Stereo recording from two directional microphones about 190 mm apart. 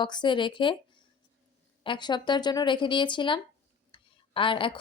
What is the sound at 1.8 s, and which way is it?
Speech, 25° left (ahead or behind).